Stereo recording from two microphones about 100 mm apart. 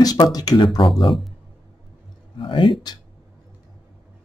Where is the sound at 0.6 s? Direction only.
55° left (ahead or behind).